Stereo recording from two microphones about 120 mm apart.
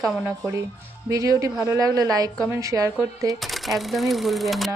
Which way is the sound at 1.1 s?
25° right (ahead or behind).